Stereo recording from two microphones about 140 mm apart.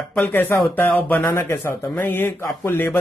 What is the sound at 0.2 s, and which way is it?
A man's voice, 15° left (ahead or behind).